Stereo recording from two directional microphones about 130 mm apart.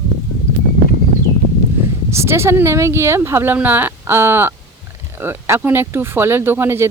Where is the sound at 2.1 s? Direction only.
20° right (ahead or behind).